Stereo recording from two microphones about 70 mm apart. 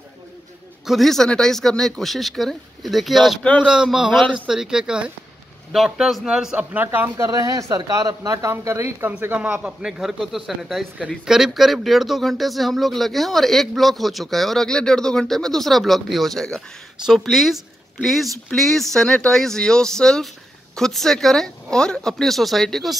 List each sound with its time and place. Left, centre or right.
0.8 s a man's voice: centre
6.7 s a man's voice: right
7.2 s speech: right
8.5 s speech: right
9.4 s a man's voice: right
9.7 s a man's voice: centre
17.0 s a man's voice: centre